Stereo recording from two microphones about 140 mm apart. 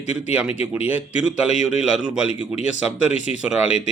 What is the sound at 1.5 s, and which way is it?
Speech, 55° left (ahead or behind).